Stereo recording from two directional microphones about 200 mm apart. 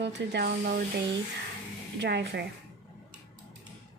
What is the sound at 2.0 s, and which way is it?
Speech, 60° right (ahead or behind).